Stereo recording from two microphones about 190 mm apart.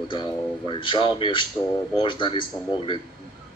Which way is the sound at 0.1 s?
25° left (ahead or behind).